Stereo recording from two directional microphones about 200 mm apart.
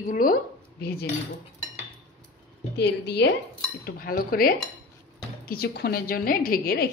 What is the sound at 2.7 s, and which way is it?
A woman's voice, 55° left (ahead or behind).